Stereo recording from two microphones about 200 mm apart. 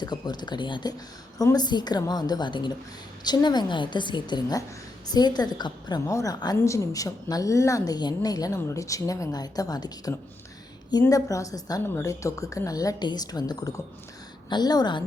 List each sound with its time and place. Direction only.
0.0 s a woman's voice: 20° left (ahead or behind)